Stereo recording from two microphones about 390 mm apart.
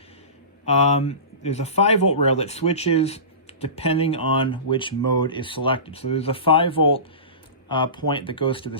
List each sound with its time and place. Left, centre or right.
0.6 s speech: centre